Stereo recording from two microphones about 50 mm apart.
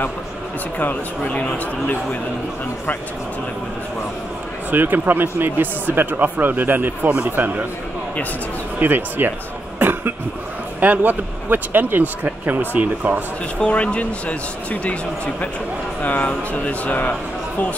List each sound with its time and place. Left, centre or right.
0.7 s speech: left
4.6 s speech: right
8.7 s speech: right
9.8 s cough: right
10.8 s speech: right
13.6 s speech: left
16.0 s speech: left